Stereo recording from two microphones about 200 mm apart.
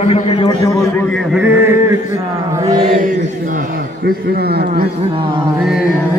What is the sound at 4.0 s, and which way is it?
Speech, 55° right (ahead or behind).